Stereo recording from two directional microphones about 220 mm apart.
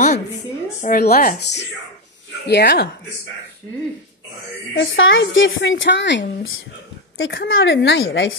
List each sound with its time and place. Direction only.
0.8 s a woman's voice: 45° left (ahead or behind)
4.7 s a woman's voice: 60° left (ahead or behind)